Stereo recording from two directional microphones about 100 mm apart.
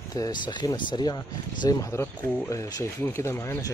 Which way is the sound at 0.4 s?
50° left (ahead or behind).